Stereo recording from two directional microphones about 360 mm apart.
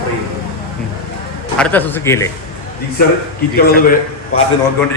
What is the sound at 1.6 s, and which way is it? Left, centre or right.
Speech, centre.